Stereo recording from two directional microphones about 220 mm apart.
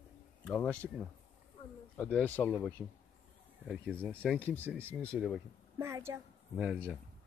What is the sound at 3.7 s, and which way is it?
Speech, 5° right (ahead or behind).